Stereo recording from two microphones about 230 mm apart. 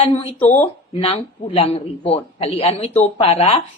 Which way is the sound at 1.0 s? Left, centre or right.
Left.